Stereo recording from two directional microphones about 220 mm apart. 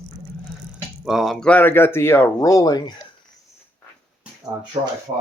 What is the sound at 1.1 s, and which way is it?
Speech, centre (ahead or behind).